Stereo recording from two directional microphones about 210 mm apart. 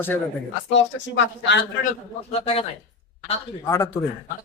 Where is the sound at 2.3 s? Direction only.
30° left (ahead or behind).